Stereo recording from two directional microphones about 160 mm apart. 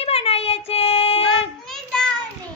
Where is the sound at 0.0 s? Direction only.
40° left (ahead or behind).